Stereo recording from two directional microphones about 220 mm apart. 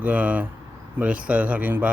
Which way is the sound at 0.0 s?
5° right (ahead or behind).